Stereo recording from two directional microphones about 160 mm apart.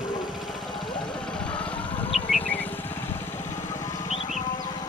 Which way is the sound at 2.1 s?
Centre (ahead or behind).